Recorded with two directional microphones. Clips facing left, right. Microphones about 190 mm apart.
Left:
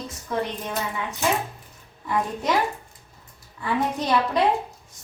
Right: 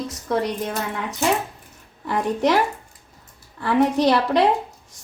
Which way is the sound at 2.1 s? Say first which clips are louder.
Right 4 dB; 75° right (ahead or behind).